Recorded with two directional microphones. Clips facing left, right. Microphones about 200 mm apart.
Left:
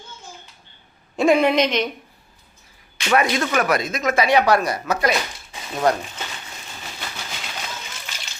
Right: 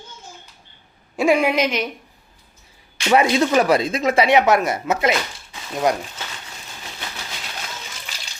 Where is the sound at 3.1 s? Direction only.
20° right (ahead or behind).